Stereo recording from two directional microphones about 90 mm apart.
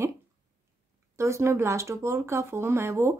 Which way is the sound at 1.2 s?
30° right (ahead or behind).